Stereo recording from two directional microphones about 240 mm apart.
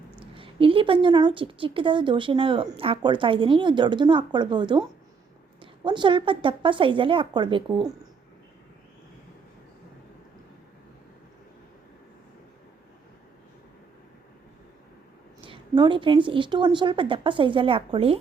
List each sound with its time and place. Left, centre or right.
0.2 s a woman's voice: right
5.8 s a woman's voice: centre
15.4 s a woman's voice: centre